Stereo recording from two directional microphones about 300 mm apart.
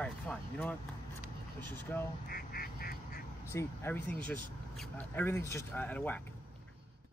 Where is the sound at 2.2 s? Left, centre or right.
Left.